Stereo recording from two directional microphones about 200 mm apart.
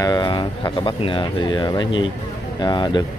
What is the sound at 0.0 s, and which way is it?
Speech, 20° left (ahead or behind).